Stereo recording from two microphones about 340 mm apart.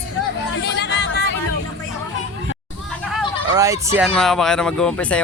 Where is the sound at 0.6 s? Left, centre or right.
Left.